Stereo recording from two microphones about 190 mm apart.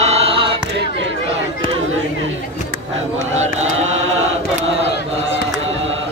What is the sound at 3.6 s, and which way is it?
Chant, 90° right.